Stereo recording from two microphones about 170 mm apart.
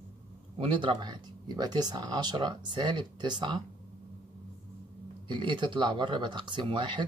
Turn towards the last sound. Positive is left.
turn(degrees=-30)  # may be behind; listen again after turning